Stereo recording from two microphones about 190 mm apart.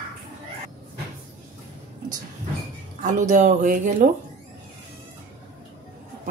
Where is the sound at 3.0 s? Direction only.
40° right (ahead or behind).